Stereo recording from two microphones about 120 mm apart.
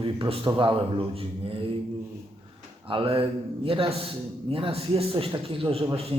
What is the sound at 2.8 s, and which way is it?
Speech, 50° right (ahead or behind).